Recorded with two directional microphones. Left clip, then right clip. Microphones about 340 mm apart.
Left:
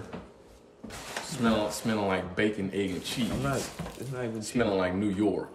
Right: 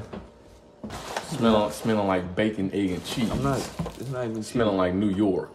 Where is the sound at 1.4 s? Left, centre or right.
Centre.